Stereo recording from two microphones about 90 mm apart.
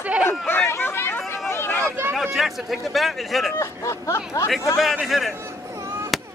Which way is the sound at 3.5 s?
30° left (ahead or behind).